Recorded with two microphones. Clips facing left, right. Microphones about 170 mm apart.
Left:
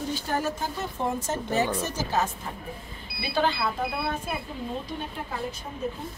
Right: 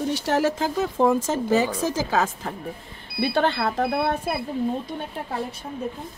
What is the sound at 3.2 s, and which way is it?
Speech, 60° right (ahead or behind).